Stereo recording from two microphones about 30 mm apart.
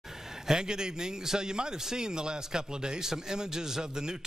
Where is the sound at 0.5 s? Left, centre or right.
Right.